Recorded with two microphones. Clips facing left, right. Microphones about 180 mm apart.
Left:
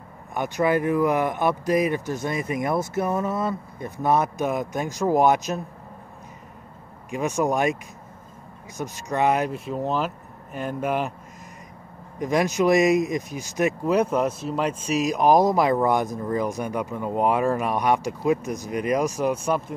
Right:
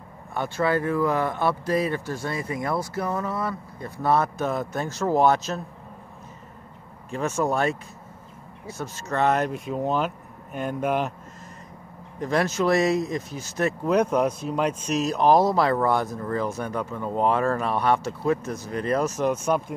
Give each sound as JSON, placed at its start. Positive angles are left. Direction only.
{"t": 0.3, "sound": "speech", "side_deg": 15}
{"t": 7.1, "sound": "speech", "side_deg": 15}
{"t": 12.2, "sound": "speech", "side_deg": 15}